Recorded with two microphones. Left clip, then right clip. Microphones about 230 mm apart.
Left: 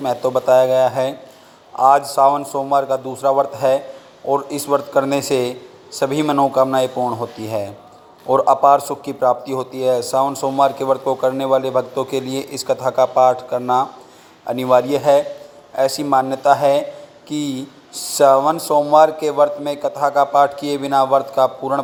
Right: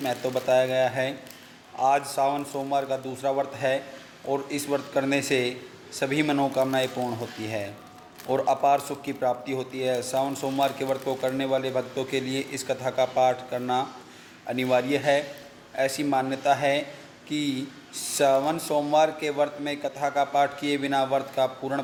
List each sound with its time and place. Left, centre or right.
0.0 s a man's voice: left
2.1 s a man's voice: centre